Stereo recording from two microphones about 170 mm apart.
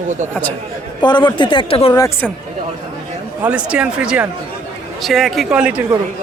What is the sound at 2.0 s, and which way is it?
Speech, 10° left (ahead or behind).